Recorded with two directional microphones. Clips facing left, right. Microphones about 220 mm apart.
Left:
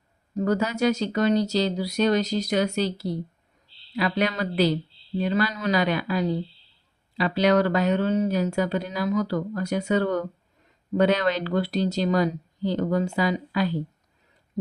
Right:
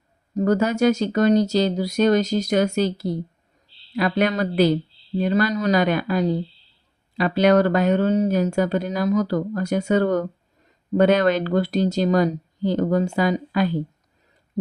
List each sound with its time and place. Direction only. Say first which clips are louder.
0.3 s speech: right 5 dB; 45° right (ahead or behind)